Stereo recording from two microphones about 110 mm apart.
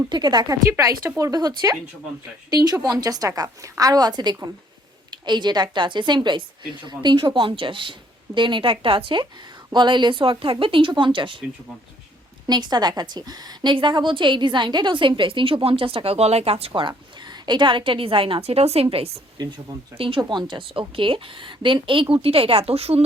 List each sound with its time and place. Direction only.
0.1 s a woman's voice: 40° right (ahead or behind)
12.5 s a woman's voice: 40° right (ahead or behind); by 16.8 s 65° right (ahead or behind)
17.2 s a woman's voice: 40° right (ahead or behind); by 19.2 s 65° right (ahead or behind)
20.0 s a woman's voice: 55° right (ahead or behind)